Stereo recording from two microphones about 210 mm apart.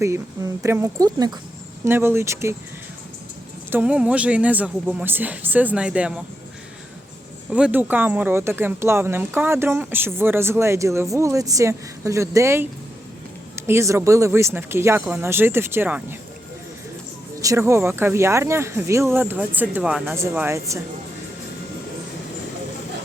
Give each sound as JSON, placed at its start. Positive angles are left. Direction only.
{"t": 0.0, "sound": "speech", "side_deg": -15}
{"t": 3.7, "sound": "speech", "side_deg": -5}
{"t": 7.5, "sound": "speech", "side_deg": -10}
{"t": 17.4, "sound": "speech", "side_deg": -15}